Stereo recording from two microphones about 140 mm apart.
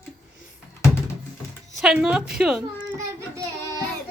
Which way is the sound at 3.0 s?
25° right (ahead or behind).